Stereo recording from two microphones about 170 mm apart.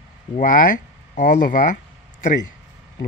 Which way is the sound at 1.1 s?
50° left (ahead or behind).